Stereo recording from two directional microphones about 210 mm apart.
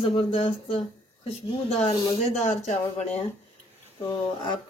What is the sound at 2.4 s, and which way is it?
Speech, 30° left (ahead or behind).